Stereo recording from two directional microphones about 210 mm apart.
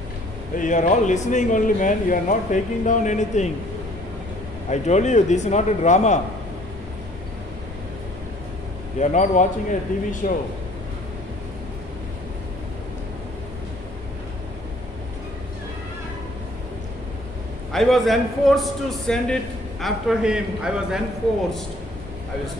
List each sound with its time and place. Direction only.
0.6 s speech: 35° left (ahead or behind)
4.6 s speech: 35° left (ahead or behind)
9.0 s speech: 35° left (ahead or behind)
17.7 s a man's voice: centre (ahead or behind)